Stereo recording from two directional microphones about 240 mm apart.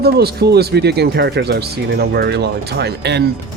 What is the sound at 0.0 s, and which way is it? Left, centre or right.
Speech, right.